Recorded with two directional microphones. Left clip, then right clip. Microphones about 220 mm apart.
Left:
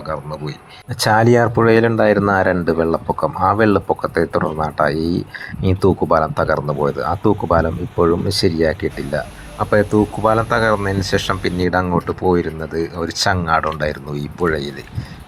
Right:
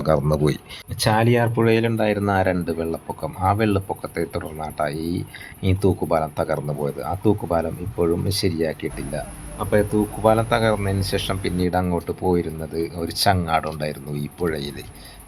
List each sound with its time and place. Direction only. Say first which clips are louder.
0.0 s speech: right 6 dB; 30° right (ahead or behind)
0.9 s speech: left 6 dB; 25° left (ahead or behind)
1.6 s speech: left 7 dB; 15° left (ahead or behind)